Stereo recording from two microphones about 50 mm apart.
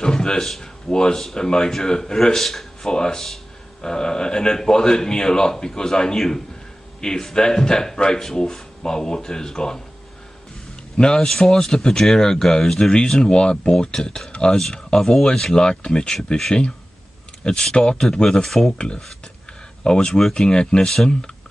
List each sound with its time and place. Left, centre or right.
0.0 s a sound: centre
0.5 s speech: centre
11.0 s speech: centre
19.8 s speech: centre